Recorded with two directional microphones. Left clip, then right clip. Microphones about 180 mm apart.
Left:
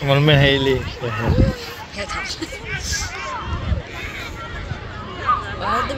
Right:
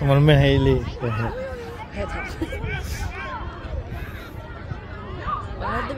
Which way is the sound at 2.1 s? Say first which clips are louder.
Left 4 dB; 50° right (ahead or behind).